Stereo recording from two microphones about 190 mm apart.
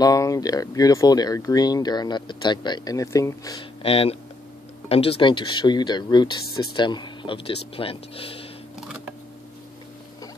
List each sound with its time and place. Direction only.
0.0 s speech: 20° left (ahead or behind)
3.8 s speech: 30° left (ahead or behind)